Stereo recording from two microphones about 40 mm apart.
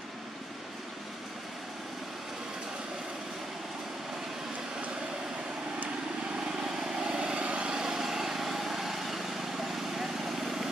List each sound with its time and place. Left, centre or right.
6.3 s vehicle: centre
7.7 s vehicle: centre